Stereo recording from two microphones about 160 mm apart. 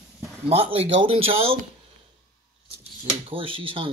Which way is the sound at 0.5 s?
35° right (ahead or behind).